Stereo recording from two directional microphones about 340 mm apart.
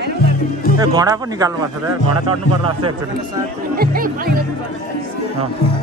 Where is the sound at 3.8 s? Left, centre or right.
Right.